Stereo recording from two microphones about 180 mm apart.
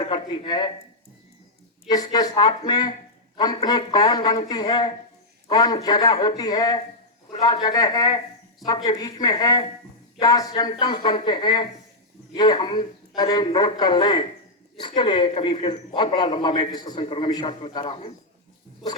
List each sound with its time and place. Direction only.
0.0 s speech: 25° left (ahead or behind)
1.9 s a man's voice: 20° left (ahead or behind)